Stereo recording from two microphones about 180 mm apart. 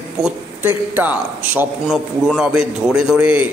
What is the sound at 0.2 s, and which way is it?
A man's voice, 10° right (ahead or behind).